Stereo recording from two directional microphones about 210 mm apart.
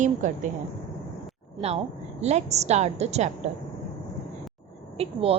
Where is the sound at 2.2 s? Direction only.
30° right (ahead or behind).